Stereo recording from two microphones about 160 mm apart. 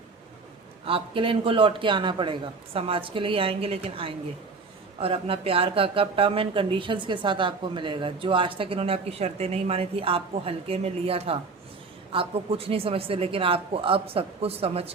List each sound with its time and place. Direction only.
0.9 s speech: 35° right (ahead or behind)